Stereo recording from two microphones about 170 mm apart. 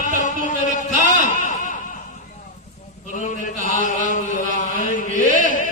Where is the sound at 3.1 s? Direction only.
50° left (ahead or behind).